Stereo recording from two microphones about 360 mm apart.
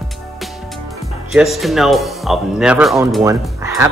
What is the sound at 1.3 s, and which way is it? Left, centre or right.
Speech, centre.